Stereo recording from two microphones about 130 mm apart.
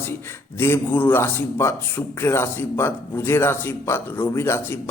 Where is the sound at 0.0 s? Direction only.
20° left (ahead or behind).